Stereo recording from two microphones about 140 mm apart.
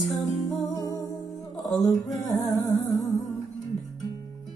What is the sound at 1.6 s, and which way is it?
Music, centre (ahead or behind).